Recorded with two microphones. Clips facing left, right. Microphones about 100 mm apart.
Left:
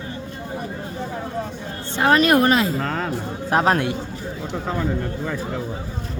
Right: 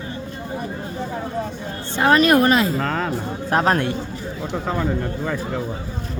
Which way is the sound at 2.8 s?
90° right.